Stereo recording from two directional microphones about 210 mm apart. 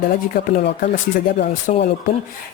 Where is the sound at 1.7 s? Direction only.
40° left (ahead or behind).